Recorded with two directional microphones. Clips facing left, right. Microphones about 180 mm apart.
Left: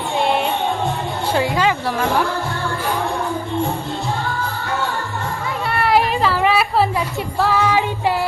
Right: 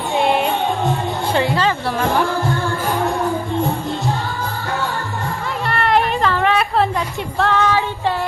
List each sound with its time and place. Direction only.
0.2 s music: centre (ahead or behind)
1.3 s speech: 10° left (ahead or behind)
5.6 s music: 5° left (ahead or behind)